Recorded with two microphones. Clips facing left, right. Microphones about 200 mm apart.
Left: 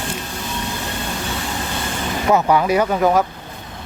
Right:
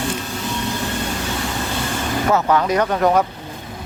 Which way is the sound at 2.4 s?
10° left (ahead or behind).